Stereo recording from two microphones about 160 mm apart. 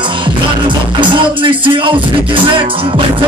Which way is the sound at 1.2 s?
30° right (ahead or behind).